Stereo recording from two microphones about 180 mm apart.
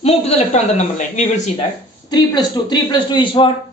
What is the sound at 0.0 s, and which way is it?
A man's voice, 35° left (ahead or behind).